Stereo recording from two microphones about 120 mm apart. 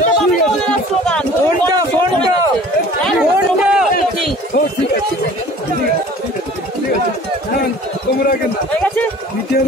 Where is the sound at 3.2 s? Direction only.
10° right (ahead or behind).